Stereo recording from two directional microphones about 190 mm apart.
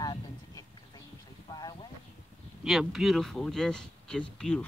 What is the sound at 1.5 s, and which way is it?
Clip-clop, 20° left (ahead or behind).